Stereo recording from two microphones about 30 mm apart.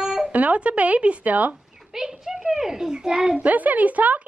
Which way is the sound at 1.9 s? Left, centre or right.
Centre.